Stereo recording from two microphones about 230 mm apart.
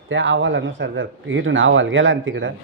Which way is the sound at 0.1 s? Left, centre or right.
Right.